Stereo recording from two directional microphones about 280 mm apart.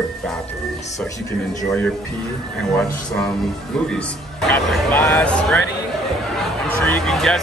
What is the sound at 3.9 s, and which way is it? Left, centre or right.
Speech, centre.